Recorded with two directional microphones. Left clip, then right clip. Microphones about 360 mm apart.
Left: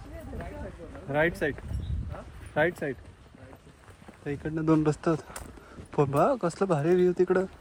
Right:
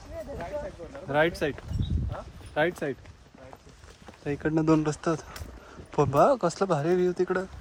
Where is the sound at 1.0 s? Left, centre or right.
Centre.